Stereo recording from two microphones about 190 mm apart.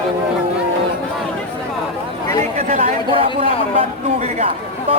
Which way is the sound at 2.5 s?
40° right (ahead or behind).